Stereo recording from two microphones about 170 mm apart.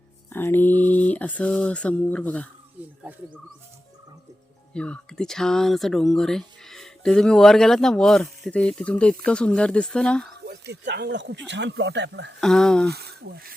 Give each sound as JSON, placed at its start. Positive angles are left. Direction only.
{"t": 0.3, "sound": "a sound", "side_deg": 10}
{"t": 2.8, "sound": "speech", "side_deg": -10}
{"t": 4.7, "sound": "speech", "side_deg": 5}
{"t": 10.4, "sound": "speech", "side_deg": -80}
{"t": 12.4, "sound": "speech", "side_deg": 5}
{"t": 12.9, "sound": "speech", "side_deg": -70}